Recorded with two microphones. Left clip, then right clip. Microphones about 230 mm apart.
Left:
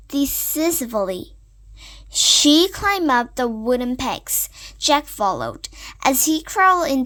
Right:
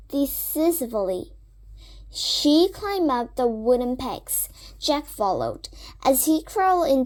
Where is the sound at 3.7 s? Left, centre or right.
Left.